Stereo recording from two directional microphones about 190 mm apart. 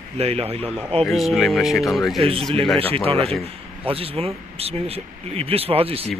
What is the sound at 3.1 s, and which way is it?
A man's voice, 30° right (ahead or behind).